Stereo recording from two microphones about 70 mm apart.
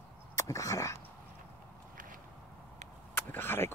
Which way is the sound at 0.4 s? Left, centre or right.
Left.